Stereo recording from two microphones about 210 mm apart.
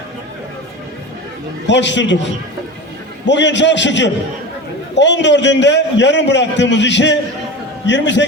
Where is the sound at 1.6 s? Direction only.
55° left (ahead or behind).